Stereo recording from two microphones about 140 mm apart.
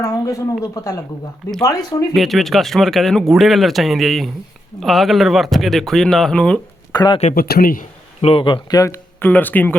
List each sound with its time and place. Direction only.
0.0 s speech: 25° left (ahead or behind)
2.1 s speech: centre (ahead or behind)
6.9 s speech: 30° left (ahead or behind)
7.2 s speech: 75° left (ahead or behind)
8.2 s speech: 45° left (ahead or behind)
8.8 s speech: 15° left (ahead or behind)